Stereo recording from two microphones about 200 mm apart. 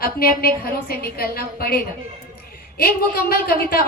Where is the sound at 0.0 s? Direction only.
50° left (ahead or behind).